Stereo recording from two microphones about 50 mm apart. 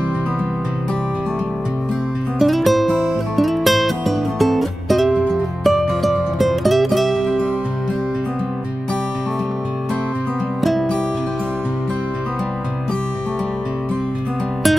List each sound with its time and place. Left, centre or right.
2.3 s music: centre
10.6 s music: centre